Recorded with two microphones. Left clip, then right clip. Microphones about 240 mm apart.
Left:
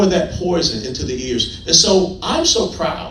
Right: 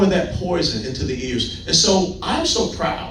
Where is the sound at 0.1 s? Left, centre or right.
Left.